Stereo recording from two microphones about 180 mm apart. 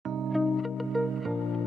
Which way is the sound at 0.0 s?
Centre (ahead or behind).